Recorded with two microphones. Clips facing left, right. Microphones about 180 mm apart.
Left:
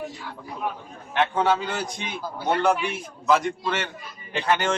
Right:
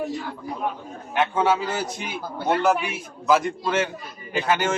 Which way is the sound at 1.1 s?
5° right (ahead or behind).